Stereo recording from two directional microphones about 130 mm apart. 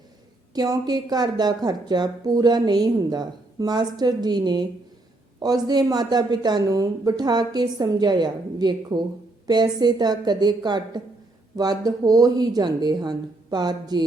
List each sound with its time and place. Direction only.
0.5 s speech: 30° right (ahead or behind)